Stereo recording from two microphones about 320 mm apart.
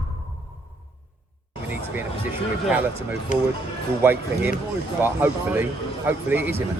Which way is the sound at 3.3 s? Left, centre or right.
Left.